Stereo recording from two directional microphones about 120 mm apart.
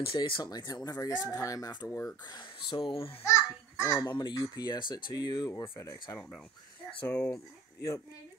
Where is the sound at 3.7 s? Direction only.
25° left (ahead or behind).